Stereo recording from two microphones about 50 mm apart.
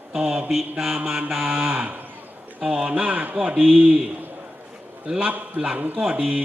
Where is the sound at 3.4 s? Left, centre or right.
Right.